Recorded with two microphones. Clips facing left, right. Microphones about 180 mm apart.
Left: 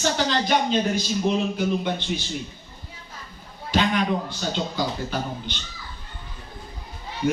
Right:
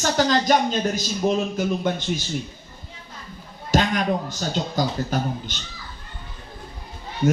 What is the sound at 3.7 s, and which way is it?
A man's voice, 45° right (ahead or behind).